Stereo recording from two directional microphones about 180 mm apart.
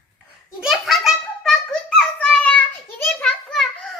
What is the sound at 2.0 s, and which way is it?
Child singing, 5° left (ahead or behind).